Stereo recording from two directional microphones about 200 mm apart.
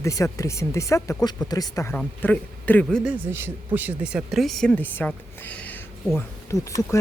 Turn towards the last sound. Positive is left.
turn(degrees=15)  # may be behind; listen again after turning